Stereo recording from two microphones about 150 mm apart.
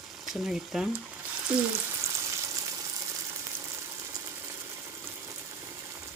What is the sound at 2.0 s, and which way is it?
Frying, 20° right (ahead or behind).